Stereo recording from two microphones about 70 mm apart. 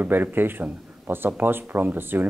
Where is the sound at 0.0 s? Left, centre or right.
Right.